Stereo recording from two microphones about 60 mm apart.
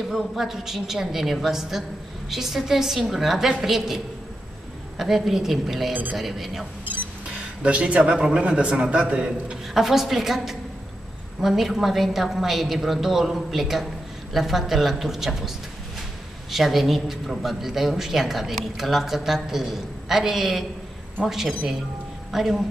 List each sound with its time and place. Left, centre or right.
0.1 s speech: centre
7.2 s speech: centre
9.8 s speech: centre